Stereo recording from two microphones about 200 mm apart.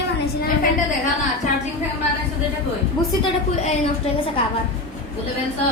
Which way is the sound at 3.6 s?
35° left (ahead or behind).